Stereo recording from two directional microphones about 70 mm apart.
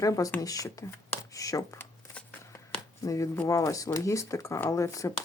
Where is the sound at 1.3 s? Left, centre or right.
Left.